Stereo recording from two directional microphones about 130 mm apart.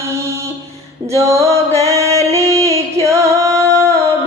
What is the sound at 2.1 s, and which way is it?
Music, 25° right (ahead or behind).